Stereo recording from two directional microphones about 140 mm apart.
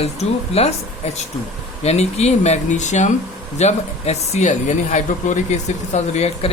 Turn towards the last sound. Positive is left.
turn(degrees=50)  # may be behind; listen again after turning